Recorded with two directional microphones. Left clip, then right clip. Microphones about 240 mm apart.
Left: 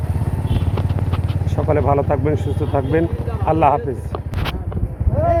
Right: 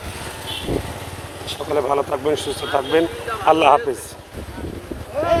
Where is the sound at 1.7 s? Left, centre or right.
Right.